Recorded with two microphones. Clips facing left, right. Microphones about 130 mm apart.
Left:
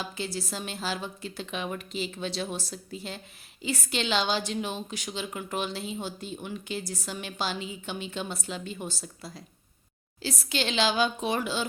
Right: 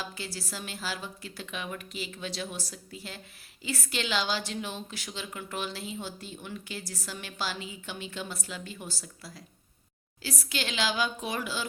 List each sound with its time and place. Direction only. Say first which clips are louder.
0.0 s a woman's voice: left 5 dB; 20° left (ahead or behind)